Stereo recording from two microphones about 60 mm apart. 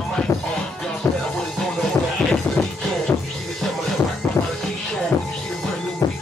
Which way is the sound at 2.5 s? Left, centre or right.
Left.